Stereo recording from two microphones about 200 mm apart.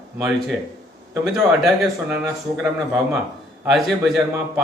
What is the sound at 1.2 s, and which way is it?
A man's voice, centre (ahead or behind).